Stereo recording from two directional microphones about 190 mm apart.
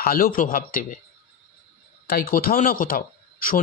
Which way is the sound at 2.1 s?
50° left (ahead or behind).